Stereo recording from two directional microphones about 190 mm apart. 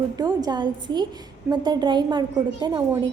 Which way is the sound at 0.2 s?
20° right (ahead or behind).